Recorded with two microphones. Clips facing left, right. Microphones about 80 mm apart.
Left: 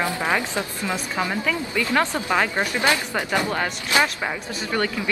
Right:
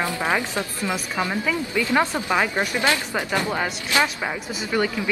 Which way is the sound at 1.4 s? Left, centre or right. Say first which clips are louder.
Right 1 dB; centre.